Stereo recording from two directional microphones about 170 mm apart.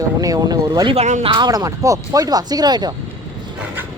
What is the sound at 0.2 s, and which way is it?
Speech, 20° right (ahead or behind).